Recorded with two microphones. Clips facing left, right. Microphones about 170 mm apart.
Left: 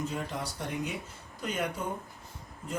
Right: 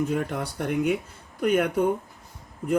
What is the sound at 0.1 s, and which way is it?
Speech, 60° right (ahead or behind).